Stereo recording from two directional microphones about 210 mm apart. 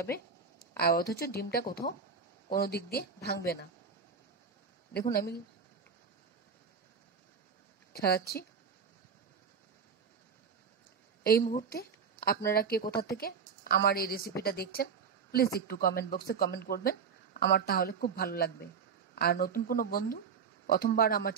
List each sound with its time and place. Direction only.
0.1 s a woman's voice: 45° left (ahead or behind)
4.9 s speech: 45° left (ahead or behind)
7.9 s a woman's voice: 50° left (ahead or behind)
11.2 s a woman's voice: 45° left (ahead or behind)